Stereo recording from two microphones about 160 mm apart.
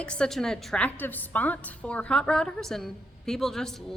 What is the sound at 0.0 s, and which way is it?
A woman's voice, 5° left (ahead or behind).